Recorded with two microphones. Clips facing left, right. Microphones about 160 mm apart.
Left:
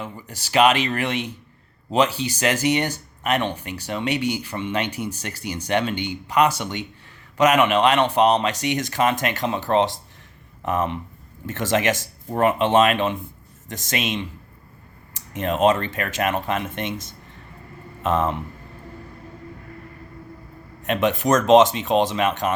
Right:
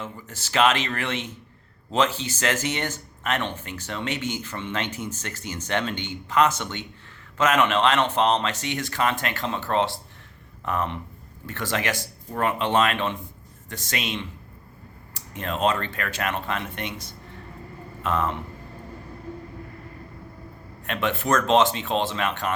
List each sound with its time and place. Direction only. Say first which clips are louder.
0.0 s speech: left 2 dB; 15° left (ahead or behind)
18.0 s speech: left 4 dB; 25° left (ahead or behind)
20.8 s speech: left 5 dB; 20° left (ahead or behind)